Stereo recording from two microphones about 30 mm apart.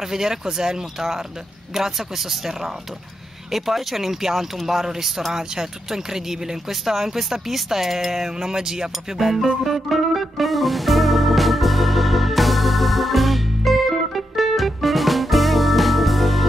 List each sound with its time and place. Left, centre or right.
0.1 s speech: centre
3.5 s speech: centre
9.7 s music: centre